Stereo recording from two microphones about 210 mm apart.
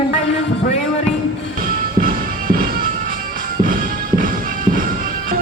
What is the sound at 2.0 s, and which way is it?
Music, 40° right (ahead or behind).